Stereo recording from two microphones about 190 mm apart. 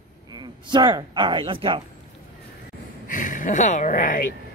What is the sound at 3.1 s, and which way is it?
Speech, 45° left (ahead or behind).